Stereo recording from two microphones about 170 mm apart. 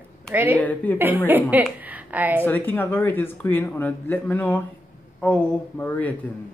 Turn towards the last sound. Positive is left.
turn(degrees=10)  # may be behind; listen again after turning